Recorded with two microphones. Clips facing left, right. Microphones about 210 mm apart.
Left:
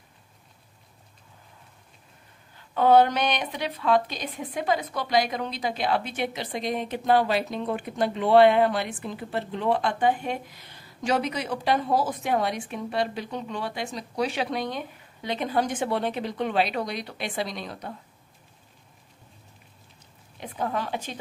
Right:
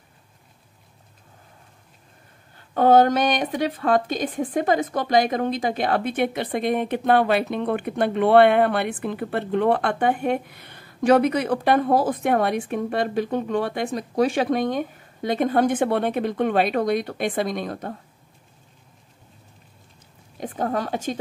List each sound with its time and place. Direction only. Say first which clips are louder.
2.5 s a woman's voice: right 3 dB; 50° right (ahead or behind)
20.3 s a woman's voice: right 4 dB; 45° right (ahead or behind)